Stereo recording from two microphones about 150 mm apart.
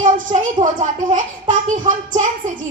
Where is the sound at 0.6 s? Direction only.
55° right (ahead or behind).